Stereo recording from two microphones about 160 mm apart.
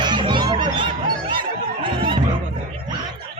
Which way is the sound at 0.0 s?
30° right (ahead or behind).